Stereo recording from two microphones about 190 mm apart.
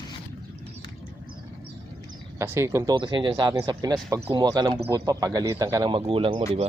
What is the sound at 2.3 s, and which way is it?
Speech, 15° right (ahead or behind).